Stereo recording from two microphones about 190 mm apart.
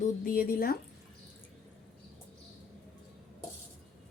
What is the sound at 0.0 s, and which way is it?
Speech, 50° left (ahead or behind).